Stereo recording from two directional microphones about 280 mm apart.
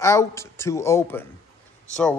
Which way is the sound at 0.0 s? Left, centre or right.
Centre.